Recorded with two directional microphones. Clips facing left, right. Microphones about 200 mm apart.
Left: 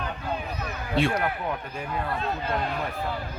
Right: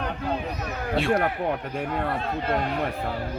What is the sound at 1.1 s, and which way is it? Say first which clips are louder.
Speech: right 4 dB; 60° right (ahead or behind).